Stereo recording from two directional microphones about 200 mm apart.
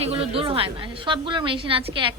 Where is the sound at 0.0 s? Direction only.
30° right (ahead or behind).